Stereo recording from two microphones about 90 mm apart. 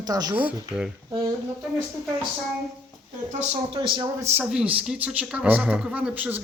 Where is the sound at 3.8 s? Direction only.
65° right (ahead or behind).